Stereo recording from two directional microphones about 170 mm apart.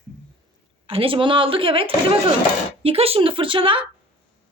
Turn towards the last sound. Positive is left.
turn(degrees=-30)  # may be behind; listen again after turning